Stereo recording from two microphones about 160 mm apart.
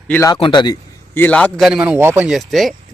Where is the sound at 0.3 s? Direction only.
30° left (ahead or behind).